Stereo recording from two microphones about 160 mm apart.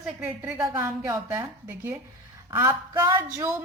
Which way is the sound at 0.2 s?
10° right (ahead or behind).